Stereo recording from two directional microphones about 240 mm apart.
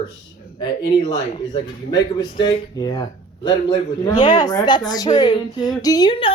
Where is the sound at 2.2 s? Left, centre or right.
Left.